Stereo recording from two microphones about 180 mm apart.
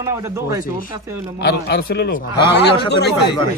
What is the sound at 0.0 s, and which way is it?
Speech, 15° right (ahead or behind).